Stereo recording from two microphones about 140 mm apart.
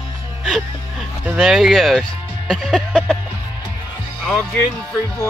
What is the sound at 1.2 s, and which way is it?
Speech, 5° right (ahead or behind).